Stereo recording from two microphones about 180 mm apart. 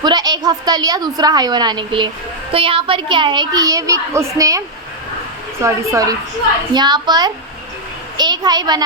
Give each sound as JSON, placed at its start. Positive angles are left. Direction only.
{"t": 0.0, "sound": "a child's voice", "side_deg": -20}
{"t": 5.6, "sound": "a woman's voice", "side_deg": -15}